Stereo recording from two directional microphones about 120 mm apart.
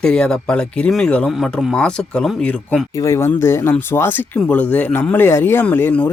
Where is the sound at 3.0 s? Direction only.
20° left (ahead or behind).